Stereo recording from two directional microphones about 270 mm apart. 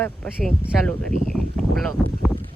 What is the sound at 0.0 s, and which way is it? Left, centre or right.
A woman's voice, centre.